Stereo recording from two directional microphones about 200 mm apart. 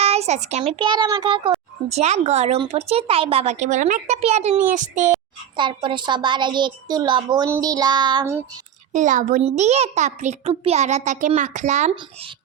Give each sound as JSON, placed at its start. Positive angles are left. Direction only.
{"t": 0.0, "sound": "a woman's voice", "side_deg": -30}
{"t": 5.5, "sound": "a woman's voice", "side_deg": -25}
{"t": 8.9, "sound": "speech", "side_deg": -40}